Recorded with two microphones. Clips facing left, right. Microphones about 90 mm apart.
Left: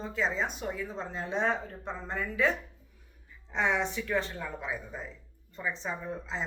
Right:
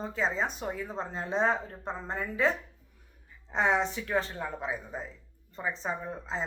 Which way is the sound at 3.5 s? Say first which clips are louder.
Right 2 dB; 40° right (ahead or behind).